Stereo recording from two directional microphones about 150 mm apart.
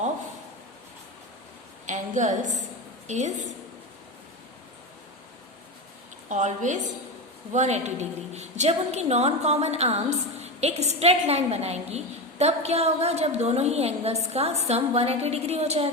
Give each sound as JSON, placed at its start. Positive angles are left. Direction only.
{"t": 1.9, "sound": "a woman's voice", "side_deg": -55}
{"t": 6.2, "sound": "a woman's voice", "side_deg": -55}